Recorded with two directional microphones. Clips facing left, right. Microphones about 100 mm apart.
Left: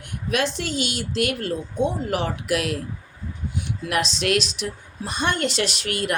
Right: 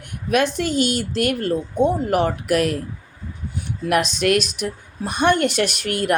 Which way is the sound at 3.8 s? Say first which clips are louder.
Right 5 dB; 55° right (ahead or behind).